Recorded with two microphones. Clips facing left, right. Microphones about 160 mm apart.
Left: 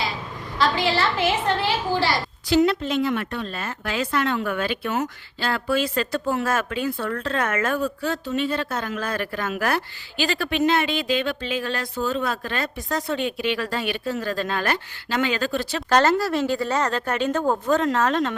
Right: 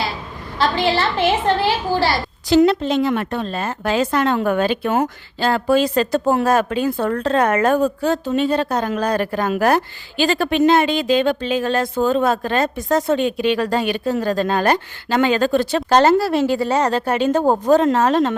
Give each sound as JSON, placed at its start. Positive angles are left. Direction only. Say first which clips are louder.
{"t": 0.8, "sound": "a woman's voice", "louder": "right 4 dB", "side_deg": -25}
{"t": 15.9, "sound": "speech", "louder": "right 5 dB", "side_deg": -25}